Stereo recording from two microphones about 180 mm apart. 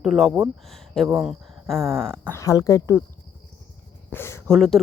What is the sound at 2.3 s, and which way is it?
Speech, 15° left (ahead or behind).